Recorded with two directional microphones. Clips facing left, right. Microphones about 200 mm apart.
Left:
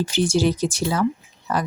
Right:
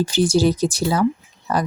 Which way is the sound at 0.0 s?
35° right (ahead or behind).